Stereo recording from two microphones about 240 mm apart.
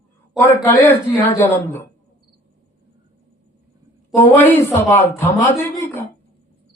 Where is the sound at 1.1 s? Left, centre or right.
Centre.